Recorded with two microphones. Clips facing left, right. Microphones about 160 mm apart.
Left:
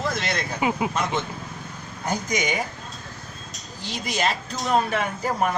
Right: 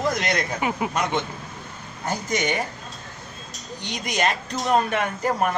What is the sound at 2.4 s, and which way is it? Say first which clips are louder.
Speech: right 3 dB; 10° left (ahead or behind).